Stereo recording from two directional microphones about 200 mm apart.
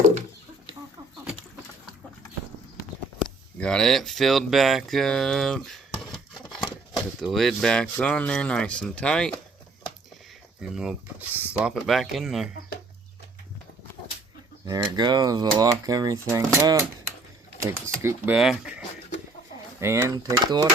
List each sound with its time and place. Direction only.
3.6 s speech: 5° left (ahead or behind)
10.6 s speech: 5° right (ahead or behind)
14.6 s speech: 20° right (ahead or behind)
17.8 s speech: 15° right (ahead or behind)
19.8 s speech: 15° right (ahead or behind)